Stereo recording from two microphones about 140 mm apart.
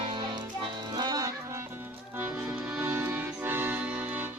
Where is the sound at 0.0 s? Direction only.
35° right (ahead or behind).